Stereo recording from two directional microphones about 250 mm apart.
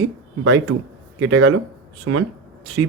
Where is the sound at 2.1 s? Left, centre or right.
Right.